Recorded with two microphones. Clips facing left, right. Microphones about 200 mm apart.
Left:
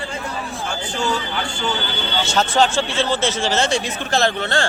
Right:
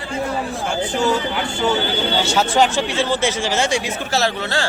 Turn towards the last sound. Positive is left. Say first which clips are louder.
# left 1 dB
turn(degrees=-5)  # may be behind; listen again after turning